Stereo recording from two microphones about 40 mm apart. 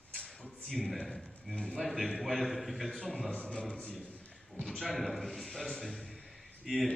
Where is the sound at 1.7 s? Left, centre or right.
Centre.